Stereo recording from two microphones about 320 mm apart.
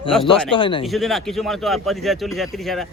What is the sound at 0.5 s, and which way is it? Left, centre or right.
Speech, centre.